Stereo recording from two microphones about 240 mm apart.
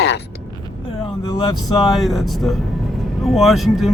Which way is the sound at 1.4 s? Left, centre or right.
Centre.